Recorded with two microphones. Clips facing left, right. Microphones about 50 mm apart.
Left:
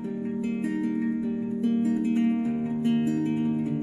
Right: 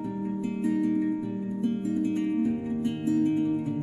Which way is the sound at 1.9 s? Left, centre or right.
Centre.